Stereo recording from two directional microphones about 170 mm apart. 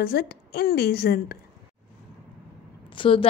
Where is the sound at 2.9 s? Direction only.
30° left (ahead or behind).